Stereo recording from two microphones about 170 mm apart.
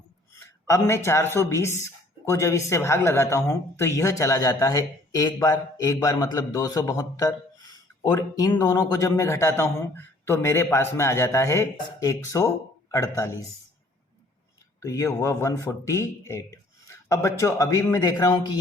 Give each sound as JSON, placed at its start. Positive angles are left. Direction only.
{"t": 0.3, "sound": "speech", "side_deg": 15}
{"t": 14.8, "sound": "speech", "side_deg": 15}